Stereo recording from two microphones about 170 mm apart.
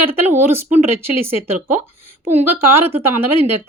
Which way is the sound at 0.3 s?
15° right (ahead or behind).